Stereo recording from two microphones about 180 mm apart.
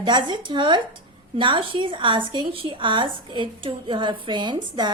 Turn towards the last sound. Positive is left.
turn(degrees=-25)  # may be behind; listen again after turning